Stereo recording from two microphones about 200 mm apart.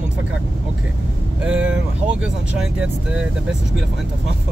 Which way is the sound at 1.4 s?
5° right (ahead or behind).